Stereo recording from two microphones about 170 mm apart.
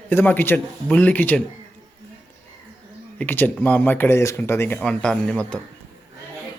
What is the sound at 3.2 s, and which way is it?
Speech, 10° left (ahead or behind).